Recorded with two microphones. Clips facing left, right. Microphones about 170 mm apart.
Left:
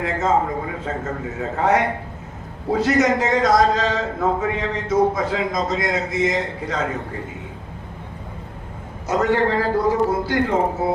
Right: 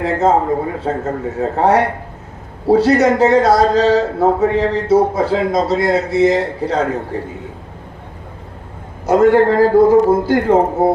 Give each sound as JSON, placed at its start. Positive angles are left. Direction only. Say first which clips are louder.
{"t": 0.0, "sound": "a man's voice", "louder": "right 6 dB", "side_deg": -35}
{"t": 9.0, "sound": "a man's voice", "louder": "right 8 dB", "side_deg": -55}